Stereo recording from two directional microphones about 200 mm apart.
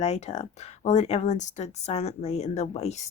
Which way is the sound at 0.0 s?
30° left (ahead or behind).